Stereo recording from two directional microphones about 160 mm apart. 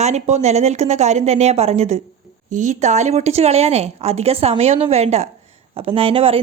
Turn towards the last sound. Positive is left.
turn(degrees=-35)  # may be behind; listen again after turning